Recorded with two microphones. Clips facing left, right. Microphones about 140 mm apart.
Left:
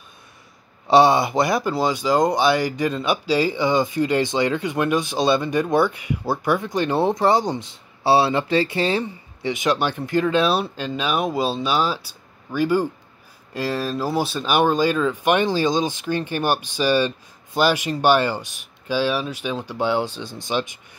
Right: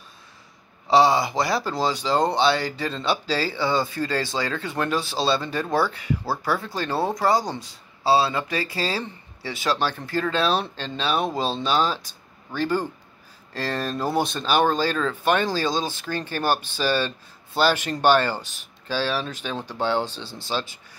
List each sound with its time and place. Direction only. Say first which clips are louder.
0.8 s speech: left 3 dB; 25° left (ahead or behind)